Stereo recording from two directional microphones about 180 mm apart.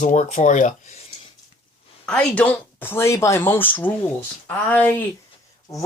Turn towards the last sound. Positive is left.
turn(degrees=10)  # may be behind; listen again after turning